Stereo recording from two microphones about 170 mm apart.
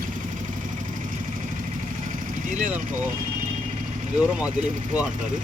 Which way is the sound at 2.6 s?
50° right (ahead or behind).